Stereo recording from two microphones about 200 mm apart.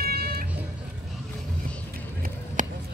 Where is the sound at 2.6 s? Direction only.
40° right (ahead or behind).